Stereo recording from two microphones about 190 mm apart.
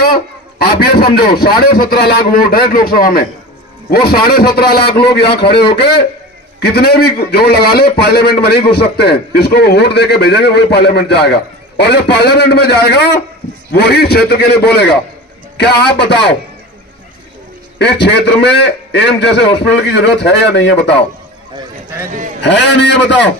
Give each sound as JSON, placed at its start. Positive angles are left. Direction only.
{"t": 0.0, "sound": "a man's voice", "side_deg": 50}
{"t": 5.2, "sound": "a man's voice", "side_deg": 30}
{"t": 6.6, "sound": "a man's voice", "side_deg": 55}
{"t": 17.7, "sound": "a man's voice", "side_deg": 60}
{"t": 22.4, "sound": "a man's voice", "side_deg": 65}